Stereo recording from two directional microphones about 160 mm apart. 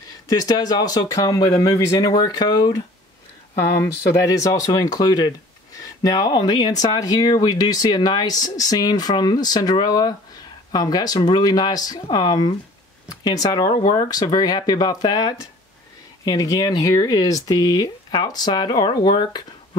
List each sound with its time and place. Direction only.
0.3 s speech: 25° left (ahead or behind)